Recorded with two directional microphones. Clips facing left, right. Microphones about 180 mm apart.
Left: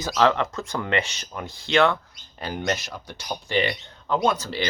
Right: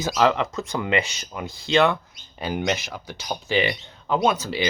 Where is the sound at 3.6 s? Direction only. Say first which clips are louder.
Left 2 dB; 15° right (ahead or behind).